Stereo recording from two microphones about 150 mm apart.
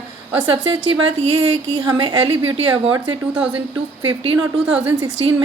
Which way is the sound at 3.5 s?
35° right (ahead or behind).